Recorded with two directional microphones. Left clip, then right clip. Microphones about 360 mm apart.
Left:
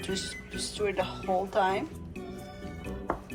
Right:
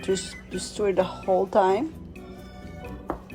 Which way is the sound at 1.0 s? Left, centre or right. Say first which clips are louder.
Right 8 dB; right.